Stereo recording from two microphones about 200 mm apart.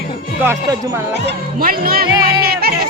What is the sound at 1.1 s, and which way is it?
Speech, 50° right (ahead or behind).